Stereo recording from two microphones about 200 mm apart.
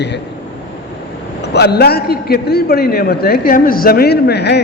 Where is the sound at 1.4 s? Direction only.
55° left (ahead or behind).